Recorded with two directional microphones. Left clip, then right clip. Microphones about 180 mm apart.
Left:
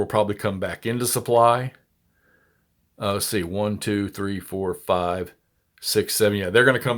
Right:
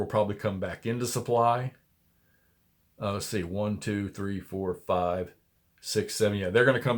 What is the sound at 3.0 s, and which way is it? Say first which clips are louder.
Speech: left 7 dB; 40° left (ahead or behind).